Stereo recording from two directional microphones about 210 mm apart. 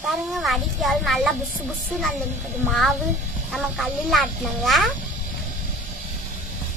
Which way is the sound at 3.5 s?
Centre (ahead or behind).